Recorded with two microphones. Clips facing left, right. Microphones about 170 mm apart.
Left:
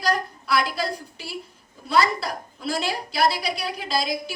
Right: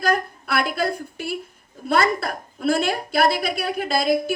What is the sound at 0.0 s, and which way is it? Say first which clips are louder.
A woman's voice: right 3 dB; 55° right (ahead or behind).